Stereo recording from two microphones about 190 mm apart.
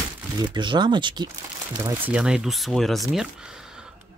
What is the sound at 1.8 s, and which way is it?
Speech, 10° right (ahead or behind).